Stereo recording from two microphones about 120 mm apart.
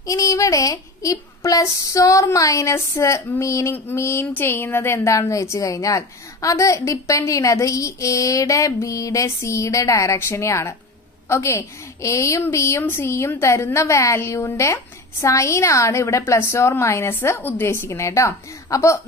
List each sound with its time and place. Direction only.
0.0 s a woman's voice: 30° left (ahead or behind)